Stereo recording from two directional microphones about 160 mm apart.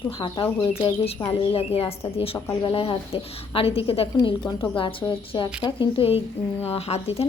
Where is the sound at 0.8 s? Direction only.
35° left (ahead or behind).